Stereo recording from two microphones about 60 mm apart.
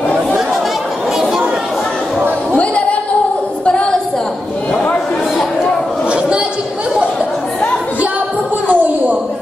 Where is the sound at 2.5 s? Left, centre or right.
Left.